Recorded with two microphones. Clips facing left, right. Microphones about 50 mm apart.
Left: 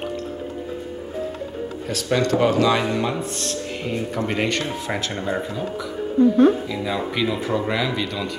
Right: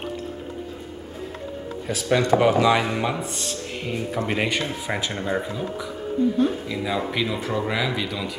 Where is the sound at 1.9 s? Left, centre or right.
Centre.